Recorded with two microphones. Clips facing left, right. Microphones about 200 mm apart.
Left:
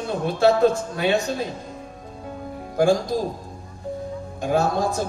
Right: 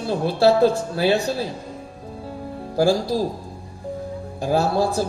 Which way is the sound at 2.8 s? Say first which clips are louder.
Even; 35° right (ahead or behind).